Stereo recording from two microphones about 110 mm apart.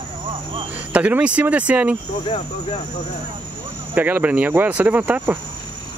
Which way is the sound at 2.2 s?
65° left (ahead or behind).